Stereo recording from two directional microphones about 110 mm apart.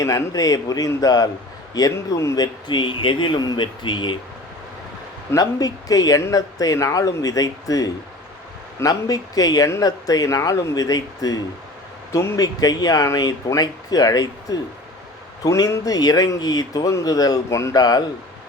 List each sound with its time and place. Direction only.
0.0 s speech: 35° left (ahead or behind)
5.3 s speech: 35° left (ahead or behind)